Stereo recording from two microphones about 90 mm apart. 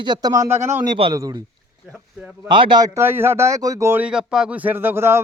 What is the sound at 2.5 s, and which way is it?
Speech, 60° right (ahead or behind).